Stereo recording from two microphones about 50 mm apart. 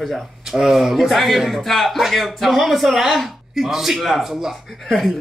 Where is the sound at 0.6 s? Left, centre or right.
Centre.